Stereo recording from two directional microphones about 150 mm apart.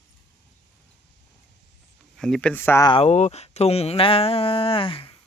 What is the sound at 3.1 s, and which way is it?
Speech, 45° left (ahead or behind).